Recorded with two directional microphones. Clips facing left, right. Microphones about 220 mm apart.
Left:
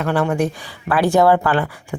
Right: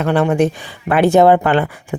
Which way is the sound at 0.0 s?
20° right (ahead or behind).